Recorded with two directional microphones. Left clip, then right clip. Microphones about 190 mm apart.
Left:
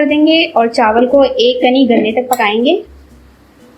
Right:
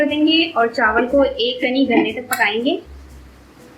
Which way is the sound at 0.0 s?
30° left (ahead or behind).